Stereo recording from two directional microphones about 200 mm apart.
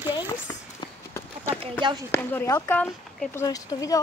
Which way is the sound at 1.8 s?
25° right (ahead or behind).